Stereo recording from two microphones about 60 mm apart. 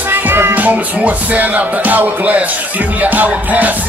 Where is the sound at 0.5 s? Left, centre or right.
Right.